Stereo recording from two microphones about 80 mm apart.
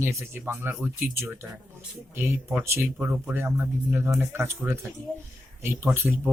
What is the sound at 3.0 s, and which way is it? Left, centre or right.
Speech, right.